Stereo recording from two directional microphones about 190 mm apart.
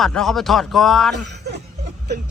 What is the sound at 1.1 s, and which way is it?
Speech, 65° right (ahead or behind).